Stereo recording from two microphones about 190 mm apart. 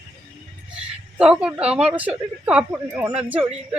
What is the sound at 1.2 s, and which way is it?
A woman's voice, 5° right (ahead or behind).